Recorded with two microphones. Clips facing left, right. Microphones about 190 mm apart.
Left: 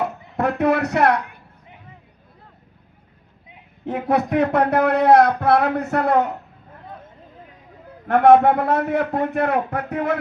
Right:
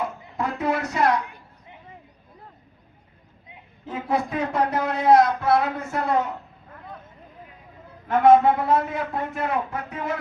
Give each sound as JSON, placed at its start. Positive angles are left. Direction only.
{"t": 0.0, "sound": "speech", "side_deg": 65}
{"t": 3.8, "sound": "speech", "side_deg": 65}
{"t": 8.0, "sound": "speech", "side_deg": 65}